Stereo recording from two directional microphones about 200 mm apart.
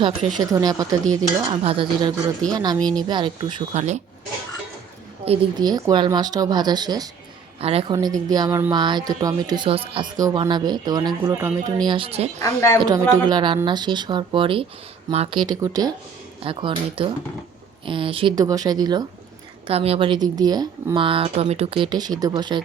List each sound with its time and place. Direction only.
0.4 s speech: 20° right (ahead or behind)
3.7 s speech: 35° right (ahead or behind)
5.2 s speech: 25° right (ahead or behind)
7.9 s speech: 20° right (ahead or behind)
12.4 s a woman's voice: 20° left (ahead or behind)
12.8 s speech: 20° right (ahead or behind)
19.6 s speech: 30° right (ahead or behind)